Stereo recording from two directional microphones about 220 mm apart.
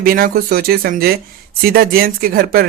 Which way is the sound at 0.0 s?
40° right (ahead or behind).